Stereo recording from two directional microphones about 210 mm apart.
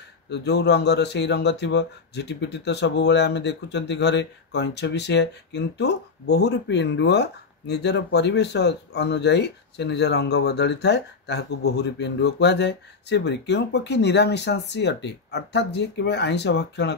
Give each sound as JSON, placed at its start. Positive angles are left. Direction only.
{"t": 0.3, "sound": "speech", "side_deg": 55}